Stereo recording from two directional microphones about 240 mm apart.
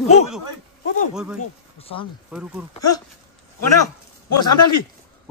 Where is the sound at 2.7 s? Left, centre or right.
Centre.